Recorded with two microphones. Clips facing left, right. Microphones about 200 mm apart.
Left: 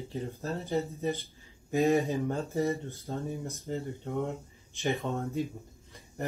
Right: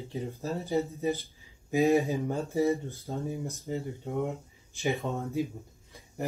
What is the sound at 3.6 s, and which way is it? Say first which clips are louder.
Speech: right 1 dB; 5° right (ahead or behind).